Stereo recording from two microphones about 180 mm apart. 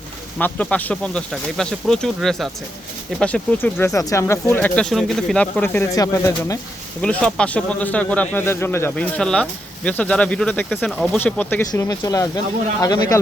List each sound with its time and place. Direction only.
0.3 s speech: 10° left (ahead or behind)
7.0 s speech: 5° left (ahead or behind)
11.7 s speech: 20° left (ahead or behind)